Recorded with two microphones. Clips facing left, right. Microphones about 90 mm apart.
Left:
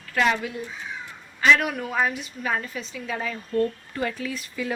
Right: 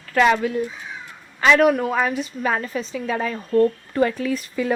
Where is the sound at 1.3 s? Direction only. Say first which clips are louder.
Right 5 dB; 55° right (ahead or behind).